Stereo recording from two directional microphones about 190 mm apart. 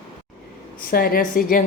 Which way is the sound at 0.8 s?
50° left (ahead or behind).